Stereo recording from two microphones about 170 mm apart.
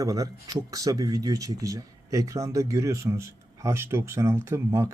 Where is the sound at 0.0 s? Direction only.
20° right (ahead or behind).